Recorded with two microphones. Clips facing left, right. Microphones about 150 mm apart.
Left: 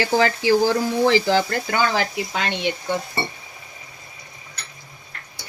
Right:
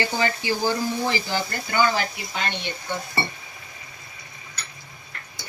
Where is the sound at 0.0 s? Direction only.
90° left.